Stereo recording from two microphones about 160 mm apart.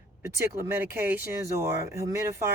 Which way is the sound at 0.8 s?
10° right (ahead or behind).